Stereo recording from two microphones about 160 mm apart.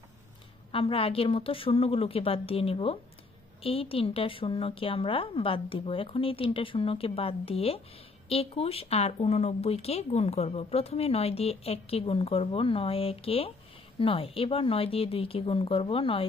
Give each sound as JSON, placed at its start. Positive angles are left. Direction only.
{"t": 0.7, "sound": "speech", "side_deg": 35}